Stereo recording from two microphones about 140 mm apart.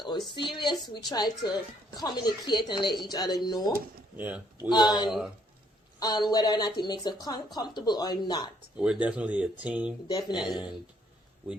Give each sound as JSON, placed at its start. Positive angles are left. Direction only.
{"t": 0.0, "sound": "a woman's voice", "side_deg": 35}
{"t": 4.2, "sound": "speech", "side_deg": -10}
{"t": 4.7, "sound": "a woman's voice", "side_deg": 30}
{"t": 8.8, "sound": "speech", "side_deg": -5}
{"t": 10.1, "sound": "a woman's voice", "side_deg": 30}
{"t": 10.5, "sound": "speech", "side_deg": -5}